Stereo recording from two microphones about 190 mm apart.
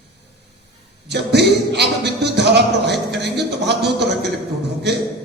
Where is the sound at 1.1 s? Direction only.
60° right (ahead or behind).